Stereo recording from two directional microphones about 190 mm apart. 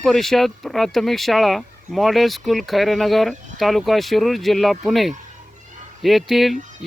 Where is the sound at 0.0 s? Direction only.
Centre (ahead or behind).